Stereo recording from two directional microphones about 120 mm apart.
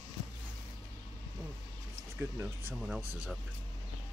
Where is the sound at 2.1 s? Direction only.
20° right (ahead or behind).